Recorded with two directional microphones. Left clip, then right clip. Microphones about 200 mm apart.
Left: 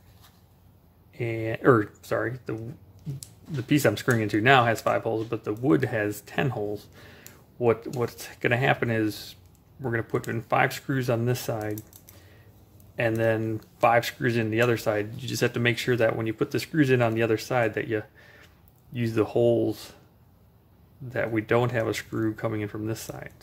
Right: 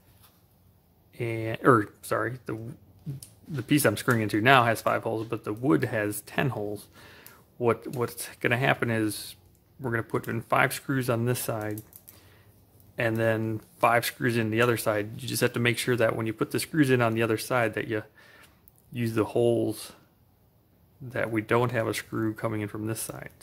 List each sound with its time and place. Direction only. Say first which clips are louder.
1.1 s speech: left 2 dB; 20° right (ahead or behind)
12.9 s speech: left 2 dB; 20° right (ahead or behind)
21.1 s speech: left 1 dB; 20° right (ahead or behind)